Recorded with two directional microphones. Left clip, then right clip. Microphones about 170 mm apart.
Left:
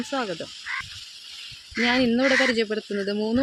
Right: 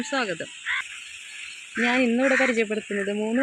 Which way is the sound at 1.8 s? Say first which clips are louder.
Even; centre (ahead or behind).